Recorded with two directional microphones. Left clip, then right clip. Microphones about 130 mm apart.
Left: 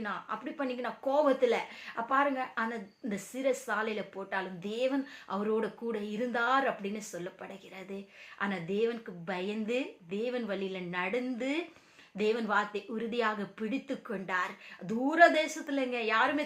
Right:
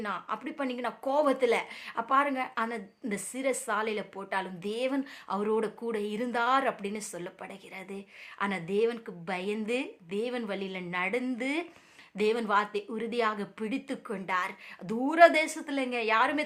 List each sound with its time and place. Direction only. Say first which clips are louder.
0.0 s speech: right 2 dB; 40° right (ahead or behind)